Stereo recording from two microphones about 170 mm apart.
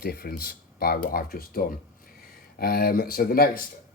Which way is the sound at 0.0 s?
65° left (ahead or behind).